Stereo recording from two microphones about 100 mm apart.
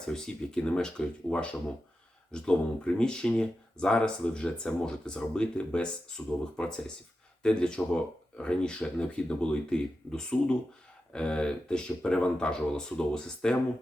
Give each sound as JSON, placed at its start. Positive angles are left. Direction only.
{"t": 0.1, "sound": "speech", "side_deg": 10}